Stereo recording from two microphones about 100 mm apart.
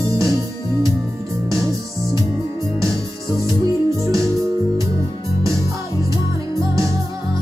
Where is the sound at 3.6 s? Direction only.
35° right (ahead or behind).